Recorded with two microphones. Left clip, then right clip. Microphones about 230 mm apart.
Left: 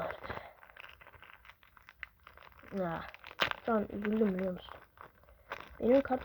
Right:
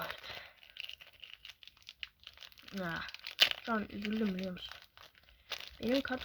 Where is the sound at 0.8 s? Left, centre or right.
Centre.